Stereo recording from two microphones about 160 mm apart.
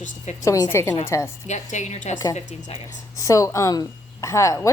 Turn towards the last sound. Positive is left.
turn(degrees=20)  # may be behind; listen again after turning